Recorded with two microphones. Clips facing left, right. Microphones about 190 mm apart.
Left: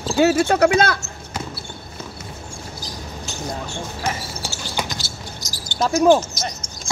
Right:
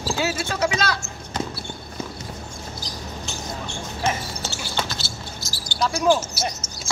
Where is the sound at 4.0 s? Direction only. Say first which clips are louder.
Right 3 dB; 15° left (ahead or behind).